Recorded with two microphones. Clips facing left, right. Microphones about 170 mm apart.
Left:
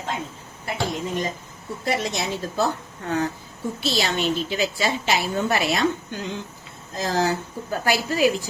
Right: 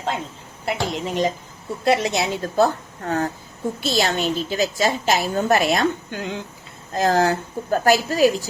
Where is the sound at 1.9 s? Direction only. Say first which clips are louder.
Right 6 dB; 75° right (ahead or behind).